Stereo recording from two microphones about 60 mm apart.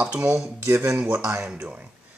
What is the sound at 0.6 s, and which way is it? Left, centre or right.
Speech, right.